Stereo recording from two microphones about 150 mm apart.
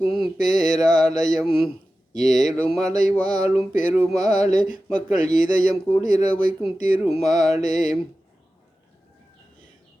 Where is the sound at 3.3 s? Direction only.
50° left (ahead or behind).